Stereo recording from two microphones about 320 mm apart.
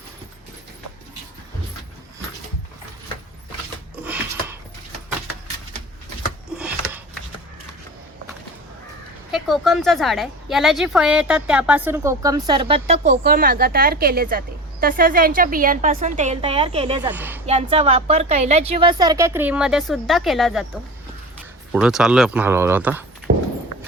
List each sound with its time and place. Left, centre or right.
4.0 s a sound: centre
6.6 s a sound: centre
9.3 s a woman's voice: centre
17.1 s speech: centre
17.4 s speech: centre
21.7 s speech: centre
23.3 s horse: right